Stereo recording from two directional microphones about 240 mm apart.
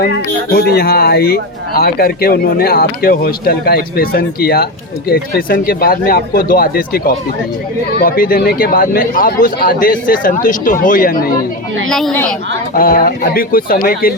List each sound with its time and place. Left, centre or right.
0.5 s a man's voice: left
8.0 s a man's voice: left
11.9 s a woman's voice: centre
12.7 s a man's voice: left